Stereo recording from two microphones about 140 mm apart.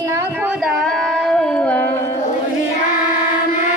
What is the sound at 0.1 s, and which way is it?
Carnatic music, 20° right (ahead or behind).